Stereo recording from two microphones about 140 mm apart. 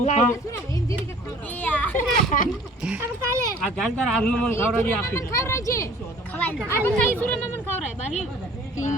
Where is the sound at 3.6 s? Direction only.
5° left (ahead or behind).